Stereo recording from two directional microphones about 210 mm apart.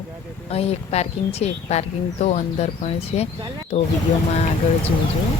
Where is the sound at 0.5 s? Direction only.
30° left (ahead or behind).